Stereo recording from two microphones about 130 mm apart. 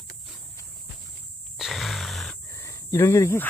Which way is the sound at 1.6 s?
Centre (ahead or behind).